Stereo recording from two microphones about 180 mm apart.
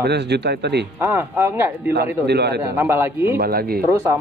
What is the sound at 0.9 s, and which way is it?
Speech, 15° right (ahead or behind).